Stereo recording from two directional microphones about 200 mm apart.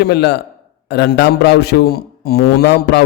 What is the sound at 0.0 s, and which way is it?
A man's voice, 55° left (ahead or behind).